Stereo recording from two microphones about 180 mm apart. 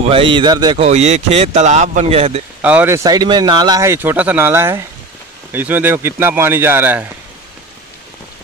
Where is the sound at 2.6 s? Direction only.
10° right (ahead or behind).